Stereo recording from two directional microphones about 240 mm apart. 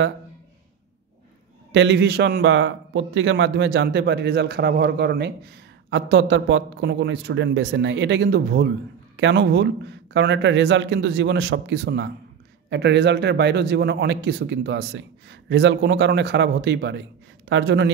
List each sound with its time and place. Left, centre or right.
1.7 s a man's voice: right